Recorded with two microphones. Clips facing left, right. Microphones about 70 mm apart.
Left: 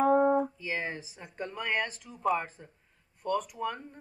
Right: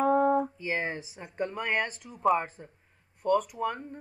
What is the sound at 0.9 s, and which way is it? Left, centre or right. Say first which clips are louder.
Speech: right 5 dB; centre.